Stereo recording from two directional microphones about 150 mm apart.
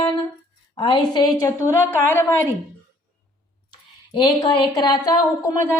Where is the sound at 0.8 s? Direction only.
30° left (ahead or behind); by 2.5 s 15° left (ahead or behind).